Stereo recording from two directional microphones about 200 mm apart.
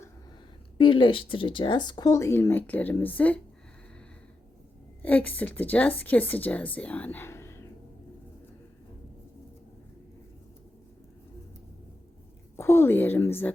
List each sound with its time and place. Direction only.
0.8 s speech: 25° left (ahead or behind); by 3.4 s 10° left (ahead or behind)
5.0 s a woman's voice: 10° left (ahead or behind)
12.5 s a woman's voice: 15° left (ahead or behind)